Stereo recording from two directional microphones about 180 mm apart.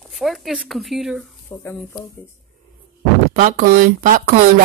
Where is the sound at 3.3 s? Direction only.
50° right (ahead or behind).